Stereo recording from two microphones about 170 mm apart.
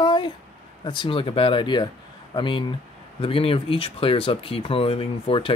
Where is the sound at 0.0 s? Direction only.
25° left (ahead or behind).